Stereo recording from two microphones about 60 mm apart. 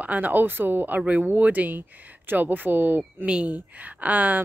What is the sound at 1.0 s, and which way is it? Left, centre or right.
Speech, centre.